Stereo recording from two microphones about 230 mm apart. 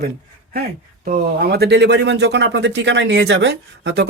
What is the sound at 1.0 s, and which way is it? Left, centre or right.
Speech, right.